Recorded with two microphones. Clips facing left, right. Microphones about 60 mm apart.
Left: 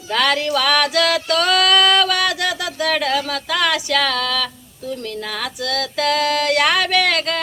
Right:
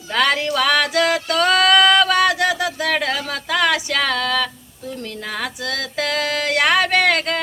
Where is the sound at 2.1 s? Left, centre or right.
Right.